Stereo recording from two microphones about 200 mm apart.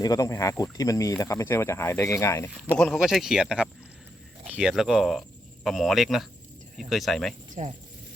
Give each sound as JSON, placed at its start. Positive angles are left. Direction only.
{"t": 0.0, "sound": "speech", "side_deg": 15}
{"t": 2.7, "sound": "speech", "side_deg": 0}
{"t": 7.6, "sound": "speech", "side_deg": -35}